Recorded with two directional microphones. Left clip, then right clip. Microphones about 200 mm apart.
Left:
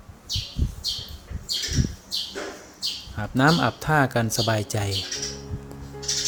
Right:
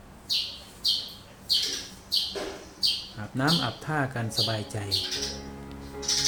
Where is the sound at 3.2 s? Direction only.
45° left (ahead or behind).